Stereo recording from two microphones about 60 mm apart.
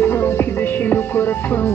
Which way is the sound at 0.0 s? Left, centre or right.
Left.